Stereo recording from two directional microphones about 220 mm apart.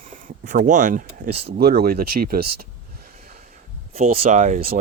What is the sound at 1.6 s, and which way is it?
Speech, 45° right (ahead or behind).